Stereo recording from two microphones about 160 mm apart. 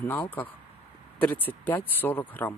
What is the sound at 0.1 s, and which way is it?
Speech, 10° left (ahead or behind).